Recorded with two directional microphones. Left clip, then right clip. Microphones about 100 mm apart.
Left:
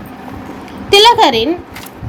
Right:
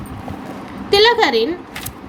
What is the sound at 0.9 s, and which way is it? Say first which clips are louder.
Speech: left 5 dB; 35° left (ahead or behind).